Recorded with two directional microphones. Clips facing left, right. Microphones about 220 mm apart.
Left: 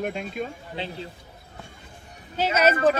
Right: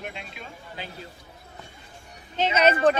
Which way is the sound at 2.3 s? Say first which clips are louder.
Even; 5° left (ahead or behind).